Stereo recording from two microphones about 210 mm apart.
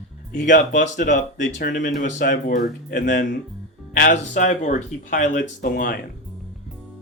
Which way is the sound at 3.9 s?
50° left (ahead or behind).